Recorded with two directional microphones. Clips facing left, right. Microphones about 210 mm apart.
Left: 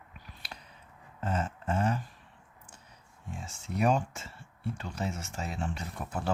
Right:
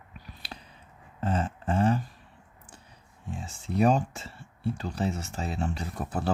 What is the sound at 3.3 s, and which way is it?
Speech, 35° right (ahead or behind).